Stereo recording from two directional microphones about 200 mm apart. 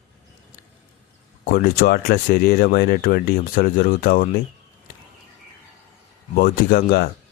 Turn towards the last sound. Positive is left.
turn(degrees=50)  # may be behind; listen again after turning